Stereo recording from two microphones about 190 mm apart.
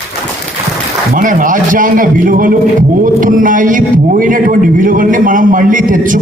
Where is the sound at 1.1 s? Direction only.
45° right (ahead or behind).